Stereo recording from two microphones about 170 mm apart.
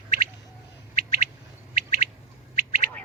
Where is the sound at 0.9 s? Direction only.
60° right (ahead or behind).